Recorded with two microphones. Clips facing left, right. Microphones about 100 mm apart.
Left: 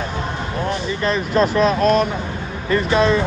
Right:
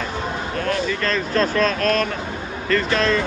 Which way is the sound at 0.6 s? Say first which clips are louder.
Even; 20° left (ahead or behind).